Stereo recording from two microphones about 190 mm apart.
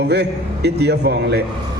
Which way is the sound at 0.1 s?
60° right (ahead or behind).